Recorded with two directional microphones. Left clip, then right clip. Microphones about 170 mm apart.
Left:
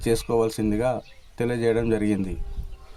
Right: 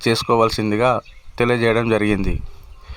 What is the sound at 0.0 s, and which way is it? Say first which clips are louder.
Speech: right 6 dB; 30° right (ahead or behind).